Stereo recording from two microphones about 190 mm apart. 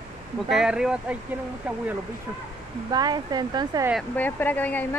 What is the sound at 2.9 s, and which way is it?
Speech, 20° right (ahead or behind).